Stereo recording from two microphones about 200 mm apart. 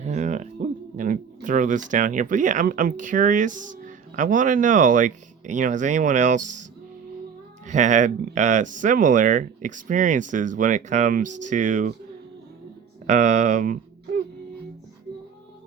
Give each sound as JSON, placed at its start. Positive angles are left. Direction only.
{"t": 0.0, "sound": "speech", "side_deg": -35}
{"t": 7.7, "sound": "speech", "side_deg": -40}
{"t": 13.1, "sound": "speech", "side_deg": -35}